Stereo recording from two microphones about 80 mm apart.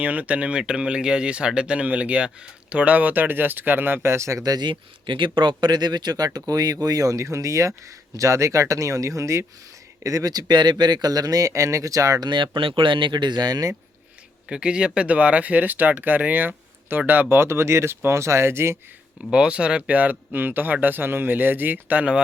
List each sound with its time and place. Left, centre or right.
0.0 s speech: centre; by 4.6 s right
4.6 s speech: right
12.2 s speech: right
14.5 s speech: centre; by 18.8 s right
19.3 s speech: centre